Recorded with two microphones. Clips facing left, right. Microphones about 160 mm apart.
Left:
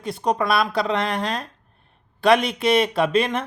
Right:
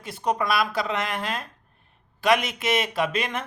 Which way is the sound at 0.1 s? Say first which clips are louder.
Left 3 dB; 25° left (ahead or behind).